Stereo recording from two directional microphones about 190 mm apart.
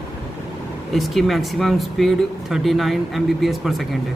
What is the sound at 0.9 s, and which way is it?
Speech, centre (ahead or behind).